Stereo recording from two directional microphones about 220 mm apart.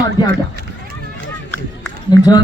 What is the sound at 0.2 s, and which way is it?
Speech, 15° left (ahead or behind).